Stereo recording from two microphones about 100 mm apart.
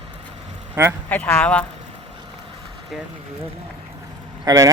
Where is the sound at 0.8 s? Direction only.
25° right (ahead or behind).